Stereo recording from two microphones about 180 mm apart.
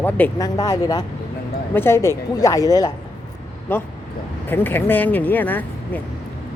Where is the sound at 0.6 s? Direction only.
20° left (ahead or behind).